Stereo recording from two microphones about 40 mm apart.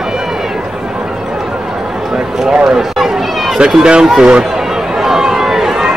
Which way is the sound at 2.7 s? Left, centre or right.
Centre.